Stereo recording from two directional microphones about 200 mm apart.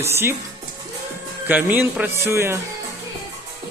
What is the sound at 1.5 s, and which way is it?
Speech, 10° right (ahead or behind).